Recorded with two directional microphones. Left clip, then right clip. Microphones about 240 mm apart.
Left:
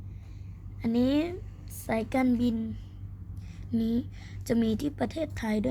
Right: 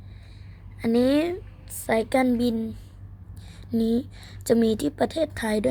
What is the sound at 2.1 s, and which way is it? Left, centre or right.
Speech, centre.